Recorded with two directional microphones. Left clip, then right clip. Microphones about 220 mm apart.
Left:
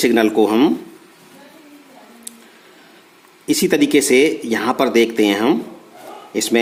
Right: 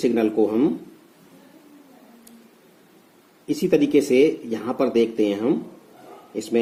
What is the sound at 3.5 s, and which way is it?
Speech, 35° left (ahead or behind).